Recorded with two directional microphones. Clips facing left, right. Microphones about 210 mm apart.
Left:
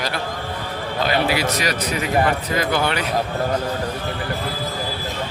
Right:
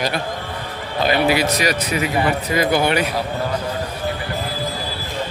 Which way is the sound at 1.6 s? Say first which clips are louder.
Right 3 dB; 10° right (ahead or behind).